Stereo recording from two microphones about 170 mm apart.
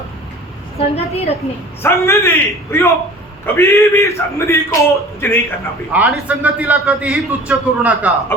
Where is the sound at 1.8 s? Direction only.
15° left (ahead or behind).